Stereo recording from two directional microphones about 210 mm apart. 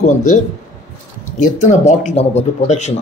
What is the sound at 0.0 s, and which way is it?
Speech, 35° left (ahead or behind).